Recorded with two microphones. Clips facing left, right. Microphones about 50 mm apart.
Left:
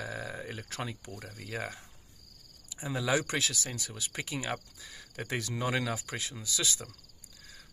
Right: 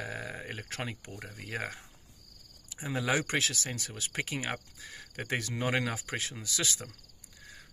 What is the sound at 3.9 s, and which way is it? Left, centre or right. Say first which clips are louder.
Cricket: right 3 dB; right.